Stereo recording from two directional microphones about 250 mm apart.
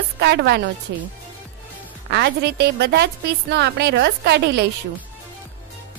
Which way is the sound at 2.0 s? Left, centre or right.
Right.